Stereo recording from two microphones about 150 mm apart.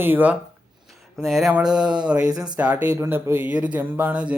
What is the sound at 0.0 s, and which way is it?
Speech, 10° right (ahead or behind).